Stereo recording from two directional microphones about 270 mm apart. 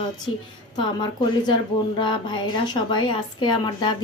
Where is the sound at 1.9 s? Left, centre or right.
Centre.